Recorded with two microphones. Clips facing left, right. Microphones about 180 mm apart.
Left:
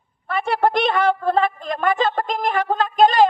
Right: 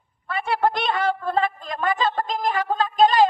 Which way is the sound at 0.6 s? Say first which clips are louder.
Left 5 dB; 50° left (ahead or behind).